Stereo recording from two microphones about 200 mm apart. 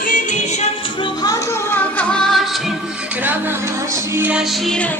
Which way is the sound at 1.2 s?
15° left (ahead or behind).